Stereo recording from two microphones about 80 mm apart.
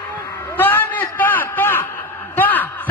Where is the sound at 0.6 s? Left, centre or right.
Left.